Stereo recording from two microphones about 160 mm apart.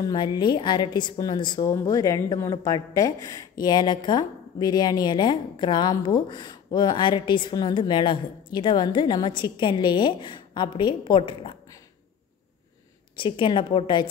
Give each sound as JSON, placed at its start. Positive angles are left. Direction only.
{"t": 0.0, "sound": "a woman's voice", "side_deg": 25}
{"t": 13.1, "sound": "a woman's voice", "side_deg": 30}